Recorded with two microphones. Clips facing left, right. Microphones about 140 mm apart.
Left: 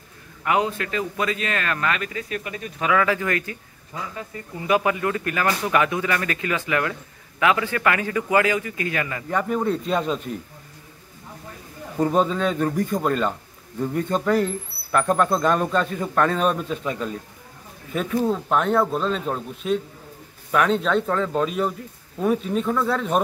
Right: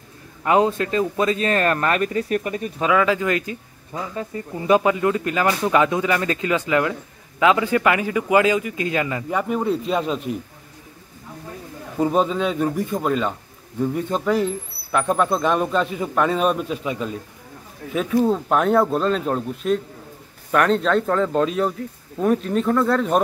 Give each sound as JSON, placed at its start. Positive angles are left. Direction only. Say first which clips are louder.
{"t": 0.4, "sound": "a man's voice", "louder": "right 5 dB", "side_deg": -30}
{"t": 2.8, "sound": "speech", "louder": "right 2 dB", "side_deg": -20}
{"t": 4.2, "sound": "speech", "louder": "right 5 dB", "side_deg": -30}
{"t": 9.3, "sound": "speech", "louder": "even", "side_deg": -10}
{"t": 12.0, "sound": "speech", "louder": "right 1 dB", "side_deg": -10}